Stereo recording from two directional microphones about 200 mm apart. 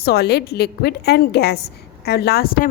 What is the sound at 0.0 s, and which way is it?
A woman's voice, 55° left (ahead or behind).